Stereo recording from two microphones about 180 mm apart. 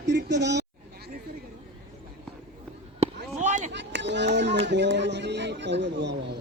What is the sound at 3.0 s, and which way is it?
Basketball bounce, 45° right (ahead or behind).